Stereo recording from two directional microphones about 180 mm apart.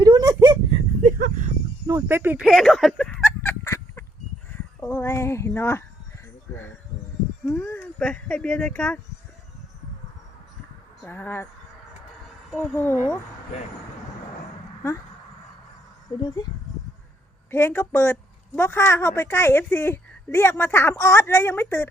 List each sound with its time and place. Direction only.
0.0 s a sound: 20° right (ahead or behind)
1.2 s a sound: 45° right (ahead or behind)
1.9 s speech: 15° right (ahead or behind); by 3.2 s 5° left (ahead or behind)
3.2 s fowl: 15° left (ahead or behind)
4.5 s a sound: 15° left (ahead or behind)
7.6 s speech: 10° left (ahead or behind)
11.0 s a woman's voice: 10° left (ahead or behind)
12.5 s a woman's voice: 10° left (ahead or behind)
16.2 s speech: 20° left (ahead or behind)
17.5 s a woman's voice: 15° left (ahead or behind)